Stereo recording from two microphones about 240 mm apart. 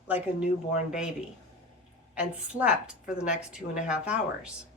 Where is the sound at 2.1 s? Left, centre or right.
Centre.